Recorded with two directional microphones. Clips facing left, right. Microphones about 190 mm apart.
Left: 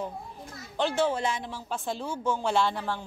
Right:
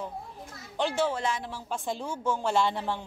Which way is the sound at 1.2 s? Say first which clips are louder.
Left 1 dB; centre (ahead or behind).